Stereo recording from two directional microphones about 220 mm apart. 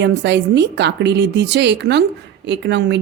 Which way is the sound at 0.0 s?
55° right (ahead or behind).